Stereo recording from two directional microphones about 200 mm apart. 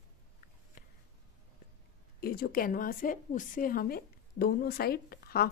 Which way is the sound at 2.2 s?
50° left (ahead or behind).